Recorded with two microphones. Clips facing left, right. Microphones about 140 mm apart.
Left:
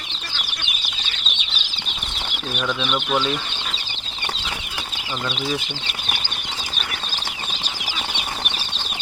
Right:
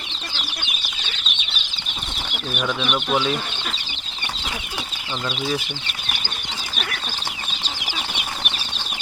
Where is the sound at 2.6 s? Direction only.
5° right (ahead or behind).